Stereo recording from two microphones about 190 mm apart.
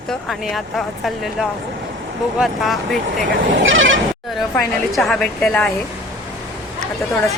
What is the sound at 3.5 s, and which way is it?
Speech, 85° right.